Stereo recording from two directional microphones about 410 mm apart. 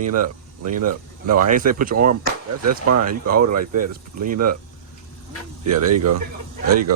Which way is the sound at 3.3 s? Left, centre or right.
Right.